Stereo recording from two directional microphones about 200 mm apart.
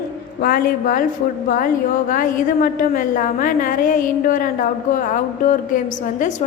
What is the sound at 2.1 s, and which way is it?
A woman's voice, 45° left (ahead or behind).